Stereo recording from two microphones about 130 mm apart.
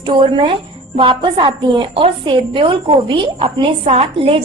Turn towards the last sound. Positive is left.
turn(degrees=-45)  # may be behind; listen again after turning